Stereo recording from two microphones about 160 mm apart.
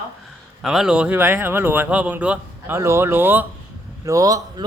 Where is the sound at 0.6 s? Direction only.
5° right (ahead or behind); by 4.6 s 20° right (ahead or behind).